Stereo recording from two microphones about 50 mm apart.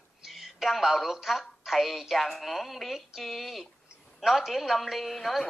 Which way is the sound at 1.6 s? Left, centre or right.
Centre.